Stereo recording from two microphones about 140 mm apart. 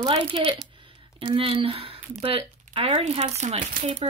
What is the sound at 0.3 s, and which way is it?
Speech, 40° right (ahead or behind).